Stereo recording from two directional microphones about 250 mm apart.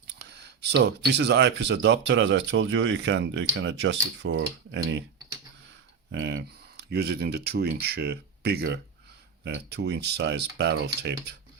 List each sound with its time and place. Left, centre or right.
0.1 s speech: right
6.1 s speech: right